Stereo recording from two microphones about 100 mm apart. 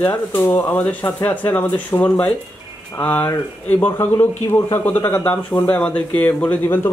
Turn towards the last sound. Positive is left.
turn(degrees=20)  # may be behind; listen again after turning